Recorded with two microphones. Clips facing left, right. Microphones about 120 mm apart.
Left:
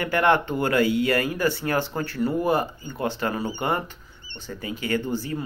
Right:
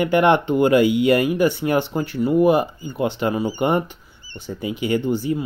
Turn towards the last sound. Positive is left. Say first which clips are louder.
# right 6 dB
turn(degrees=-15)  # may be behind; listen again after turning